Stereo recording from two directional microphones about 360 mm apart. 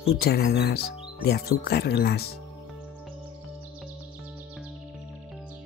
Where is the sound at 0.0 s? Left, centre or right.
Left.